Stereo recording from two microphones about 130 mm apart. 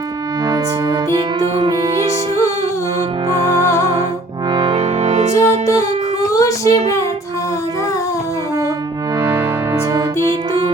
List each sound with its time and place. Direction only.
1.4 s music: 35° right (ahead or behind)
3.2 s music: 25° right (ahead or behind)
4.8 s music: 60° right (ahead or behind)
5.3 s music: 20° left (ahead or behind)
6.3 s a sound: 25° left (ahead or behind)